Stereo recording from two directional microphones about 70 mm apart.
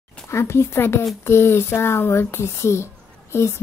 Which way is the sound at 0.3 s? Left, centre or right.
Left.